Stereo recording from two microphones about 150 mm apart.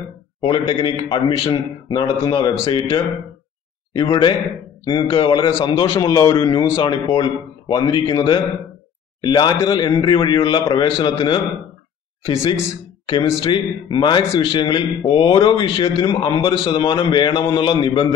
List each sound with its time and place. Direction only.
0.4 s a man's voice: 30° left (ahead or behind)